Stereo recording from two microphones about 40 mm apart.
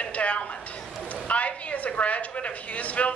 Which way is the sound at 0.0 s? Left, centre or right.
Left.